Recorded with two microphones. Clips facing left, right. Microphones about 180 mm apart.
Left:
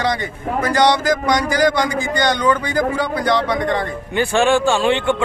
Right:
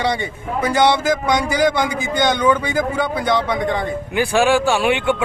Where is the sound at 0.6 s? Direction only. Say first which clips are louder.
Even; 10° right (ahead or behind).